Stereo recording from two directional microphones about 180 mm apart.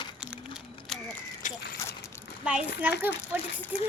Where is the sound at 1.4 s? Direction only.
45° left (ahead or behind).